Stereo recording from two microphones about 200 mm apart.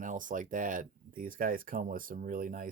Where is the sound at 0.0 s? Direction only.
40° right (ahead or behind).